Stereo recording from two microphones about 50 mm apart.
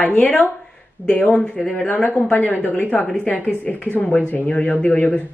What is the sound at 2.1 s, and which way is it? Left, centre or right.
Speech, left.